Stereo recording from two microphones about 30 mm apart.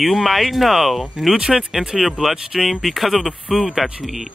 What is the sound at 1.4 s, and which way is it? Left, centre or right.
Speech, centre.